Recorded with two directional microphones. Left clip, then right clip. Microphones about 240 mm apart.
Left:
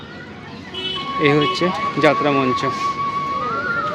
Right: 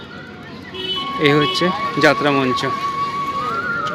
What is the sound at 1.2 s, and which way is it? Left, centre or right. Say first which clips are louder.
Speech: right 1 dB; centre.